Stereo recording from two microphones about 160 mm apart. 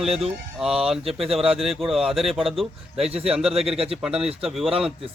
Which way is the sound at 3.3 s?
5° right (ahead or behind).